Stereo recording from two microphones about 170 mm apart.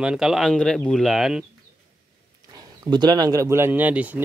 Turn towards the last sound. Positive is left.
turn(degrees=-10)  # may be behind; listen again after turning